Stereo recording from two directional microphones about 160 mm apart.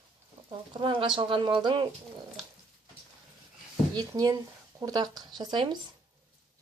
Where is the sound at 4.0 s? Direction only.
25° right (ahead or behind).